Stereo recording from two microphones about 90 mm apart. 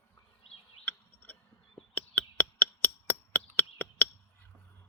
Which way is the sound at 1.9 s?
15° left (ahead or behind).